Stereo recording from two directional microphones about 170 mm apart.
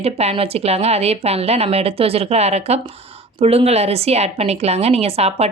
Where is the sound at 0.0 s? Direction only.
35° right (ahead or behind).